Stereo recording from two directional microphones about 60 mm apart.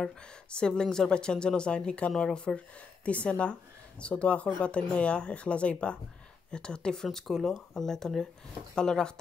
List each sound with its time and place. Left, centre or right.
0.0 s speech: centre